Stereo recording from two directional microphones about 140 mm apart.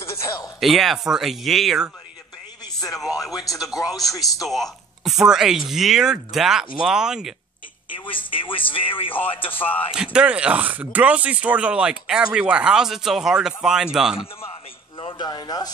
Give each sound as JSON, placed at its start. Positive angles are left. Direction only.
{"t": 0.0, "sound": "a sound", "side_deg": 20}
{"t": 0.6, "sound": "speech", "side_deg": 0}
{"t": 2.6, "sound": "a sound", "side_deg": 25}
{"t": 3.3, "sound": "speech", "side_deg": 25}
{"t": 4.4, "sound": "speech", "side_deg": 0}
{"t": 7.9, "sound": "speech", "side_deg": 35}
{"t": 10.1, "sound": "speech", "side_deg": -10}
{"t": 15.0, "sound": "speech", "side_deg": 35}